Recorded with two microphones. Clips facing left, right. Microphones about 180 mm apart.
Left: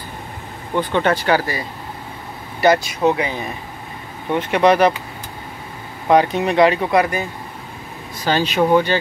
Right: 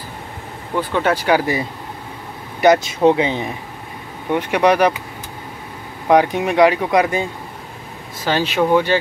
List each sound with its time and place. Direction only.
0.7 s speech: 5° right (ahead or behind); by 3.4 s 25° right (ahead or behind)
4.3 s speech: 10° right (ahead or behind)
6.0 s speech: 15° right (ahead or behind)
8.3 s speech: 5° right (ahead or behind)